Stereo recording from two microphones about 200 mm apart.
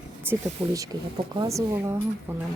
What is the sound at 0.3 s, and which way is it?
Speech, 15° right (ahead or behind).